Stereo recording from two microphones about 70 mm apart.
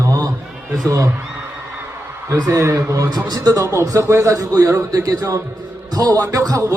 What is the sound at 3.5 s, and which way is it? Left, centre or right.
A man's voice, right.